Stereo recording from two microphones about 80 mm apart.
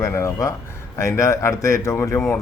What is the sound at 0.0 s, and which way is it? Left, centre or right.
Speech, left.